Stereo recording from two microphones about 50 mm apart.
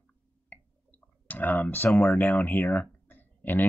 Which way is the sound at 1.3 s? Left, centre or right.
Left.